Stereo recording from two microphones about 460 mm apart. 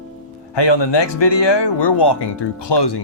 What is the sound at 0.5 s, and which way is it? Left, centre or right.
Speech, left.